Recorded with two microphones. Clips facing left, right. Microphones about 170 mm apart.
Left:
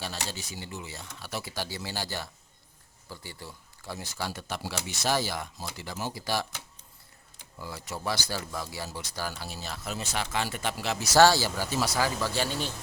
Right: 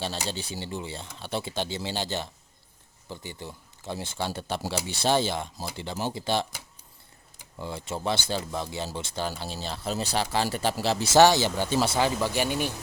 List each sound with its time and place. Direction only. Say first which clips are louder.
0.0 s speech: right 5 dB; 30° right (ahead or behind)
7.6 s speech: right 4 dB; 25° right (ahead or behind)